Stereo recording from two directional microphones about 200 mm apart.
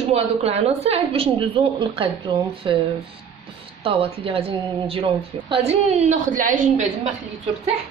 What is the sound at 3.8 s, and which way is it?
A woman's voice, 25° right (ahead or behind).